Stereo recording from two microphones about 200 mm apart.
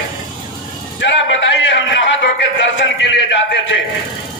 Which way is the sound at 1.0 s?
65° left (ahead or behind).